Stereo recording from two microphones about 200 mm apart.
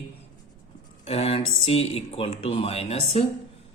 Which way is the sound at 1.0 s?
30° left (ahead or behind).